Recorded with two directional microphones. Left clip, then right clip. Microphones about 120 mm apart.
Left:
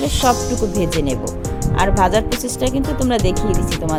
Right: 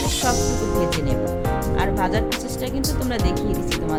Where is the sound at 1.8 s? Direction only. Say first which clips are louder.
Left 9 dB; 55° left (ahead or behind).